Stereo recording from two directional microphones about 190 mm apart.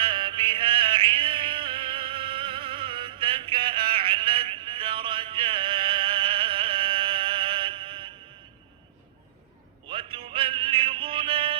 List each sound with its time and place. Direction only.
0.0 s music: 25° right (ahead or behind)
9.9 s music: 25° right (ahead or behind)